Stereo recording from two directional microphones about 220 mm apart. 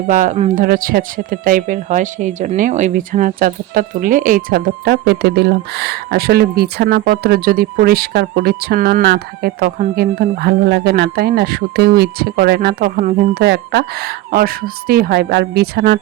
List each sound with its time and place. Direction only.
0.1 s speech: 35° right (ahead or behind)